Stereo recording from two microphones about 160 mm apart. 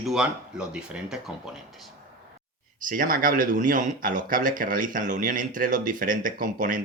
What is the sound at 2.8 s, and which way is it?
Speech, 60° right (ahead or behind).